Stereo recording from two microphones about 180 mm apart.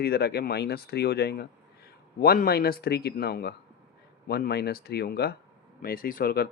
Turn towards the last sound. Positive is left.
turn(degrees=55)  # may be behind; listen again after turning